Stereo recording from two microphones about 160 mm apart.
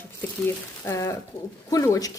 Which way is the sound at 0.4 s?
15° left (ahead or behind).